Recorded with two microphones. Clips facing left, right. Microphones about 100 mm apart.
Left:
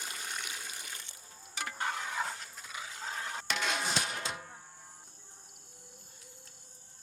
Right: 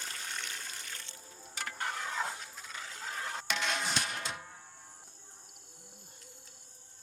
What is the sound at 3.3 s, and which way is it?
Music, 5° left (ahead or behind).